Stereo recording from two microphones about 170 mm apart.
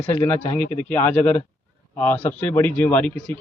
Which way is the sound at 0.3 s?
10° left (ahead or behind).